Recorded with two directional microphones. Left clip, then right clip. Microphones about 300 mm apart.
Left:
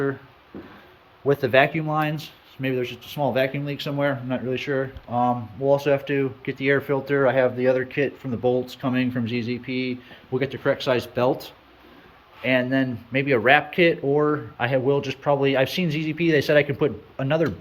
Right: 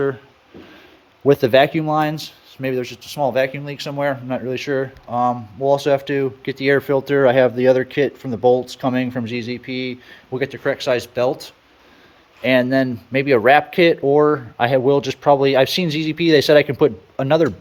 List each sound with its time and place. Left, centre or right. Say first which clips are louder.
1.3 s speech: right 5 dB; right; by 11.3 s centre
12.4 s speech: right 6 dB; right